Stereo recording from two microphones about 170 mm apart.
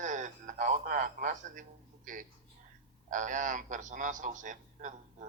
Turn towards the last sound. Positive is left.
turn(degrees=-50)  # may be behind; listen again after turning